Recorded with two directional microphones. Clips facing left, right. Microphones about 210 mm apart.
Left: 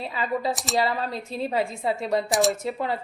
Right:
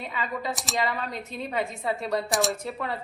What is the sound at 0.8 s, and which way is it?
Speech, 30° left (ahead or behind).